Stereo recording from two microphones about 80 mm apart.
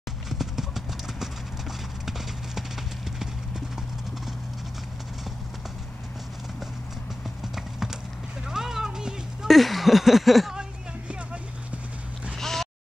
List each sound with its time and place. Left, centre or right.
0.3 s clip-clop: centre
7.4 s clip-clop: centre
8.5 s a sound: centre
12.4 s boat: centre